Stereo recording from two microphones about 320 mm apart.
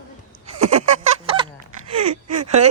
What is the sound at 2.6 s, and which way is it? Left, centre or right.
Speech, right.